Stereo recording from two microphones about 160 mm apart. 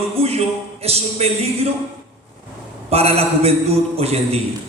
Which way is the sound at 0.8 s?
40° right (ahead or behind).